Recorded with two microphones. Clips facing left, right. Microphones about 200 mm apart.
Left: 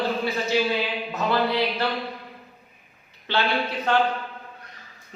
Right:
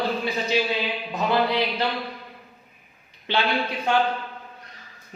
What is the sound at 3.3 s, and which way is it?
Speech, 15° right (ahead or behind).